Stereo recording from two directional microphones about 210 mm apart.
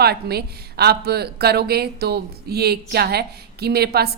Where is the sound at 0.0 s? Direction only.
50° right (ahead or behind).